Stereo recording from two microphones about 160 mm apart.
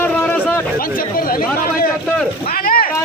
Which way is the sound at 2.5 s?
65° left (ahead or behind).